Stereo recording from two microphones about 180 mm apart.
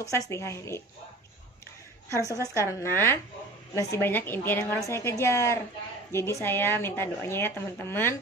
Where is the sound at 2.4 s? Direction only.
15° left (ahead or behind).